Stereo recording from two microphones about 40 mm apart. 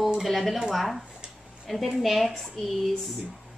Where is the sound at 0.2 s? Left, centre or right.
Centre.